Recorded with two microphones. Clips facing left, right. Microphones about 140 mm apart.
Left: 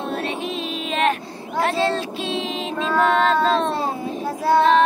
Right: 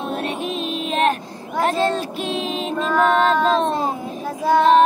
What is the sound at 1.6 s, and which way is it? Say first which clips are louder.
Child singing: right 1 dB; 15° right (ahead or behind).